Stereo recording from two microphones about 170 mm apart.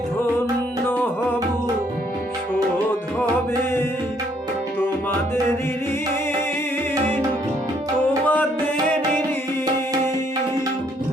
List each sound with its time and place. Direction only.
8.2 s music: 10° left (ahead or behind)